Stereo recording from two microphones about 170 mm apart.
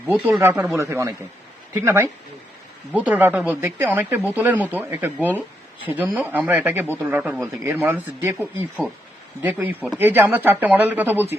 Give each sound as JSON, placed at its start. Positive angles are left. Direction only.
{"t": 0.1, "sound": "speech", "side_deg": 0}